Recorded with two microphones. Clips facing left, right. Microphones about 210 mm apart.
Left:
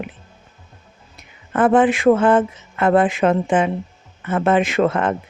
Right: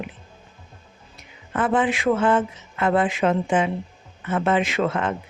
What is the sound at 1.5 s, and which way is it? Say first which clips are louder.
Speech: left 7 dB; 50° left (ahead or behind).